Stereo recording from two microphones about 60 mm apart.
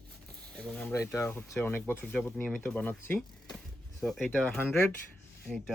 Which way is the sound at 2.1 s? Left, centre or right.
Left.